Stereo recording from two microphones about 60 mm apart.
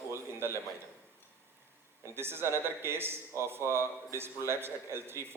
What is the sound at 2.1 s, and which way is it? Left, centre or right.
A man's voice, right.